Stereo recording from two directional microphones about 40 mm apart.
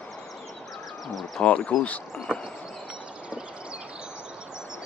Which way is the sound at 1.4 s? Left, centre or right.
Left.